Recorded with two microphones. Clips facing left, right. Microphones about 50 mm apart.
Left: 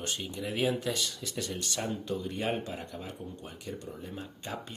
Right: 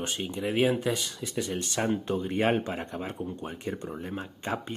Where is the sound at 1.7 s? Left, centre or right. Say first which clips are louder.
Right 6 dB; right.